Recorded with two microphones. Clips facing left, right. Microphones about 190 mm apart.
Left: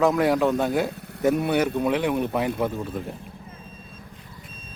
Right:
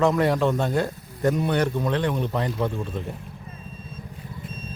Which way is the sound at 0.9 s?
70° left (ahead or behind).